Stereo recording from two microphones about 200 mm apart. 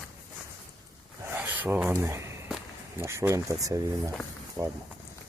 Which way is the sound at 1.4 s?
10° right (ahead or behind).